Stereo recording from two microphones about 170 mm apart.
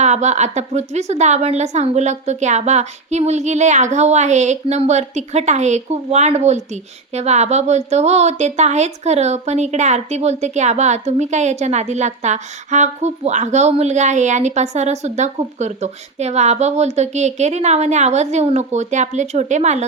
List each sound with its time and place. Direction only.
0.0 s a woman's voice: 45° right (ahead or behind)